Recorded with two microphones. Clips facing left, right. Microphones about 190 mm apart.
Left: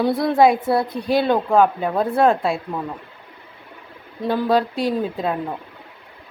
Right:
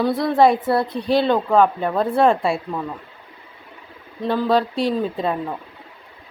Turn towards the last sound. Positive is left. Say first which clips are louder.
# right 1 dB
turn(degrees=5)  # may be behind; listen again after turning